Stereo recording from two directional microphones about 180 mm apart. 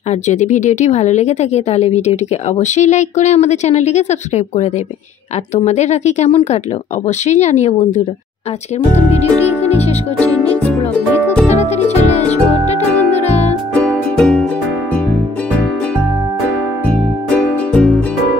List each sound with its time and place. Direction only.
0.1 s a woman's voice: 40° left (ahead or behind)
11.4 s music: 40° left (ahead or behind)
13.7 s music: 5° left (ahead or behind)